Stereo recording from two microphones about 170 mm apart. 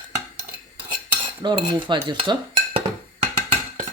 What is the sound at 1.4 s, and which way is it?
Speech, 30° right (ahead or behind).